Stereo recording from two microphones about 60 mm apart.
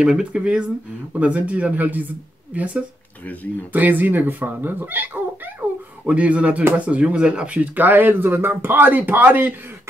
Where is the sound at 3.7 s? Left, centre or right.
Right.